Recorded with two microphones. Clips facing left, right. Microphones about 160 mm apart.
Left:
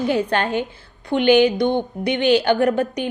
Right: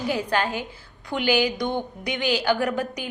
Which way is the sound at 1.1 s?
25° left (ahead or behind).